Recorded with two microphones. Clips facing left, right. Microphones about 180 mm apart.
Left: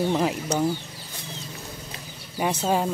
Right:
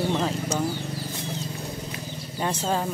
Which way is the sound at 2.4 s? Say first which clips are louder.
Left 2 dB; 10° left (ahead or behind).